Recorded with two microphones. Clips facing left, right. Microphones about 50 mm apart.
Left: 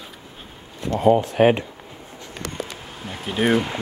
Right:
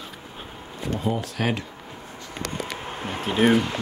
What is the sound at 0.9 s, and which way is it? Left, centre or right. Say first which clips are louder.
Speech: left 10 dB; left.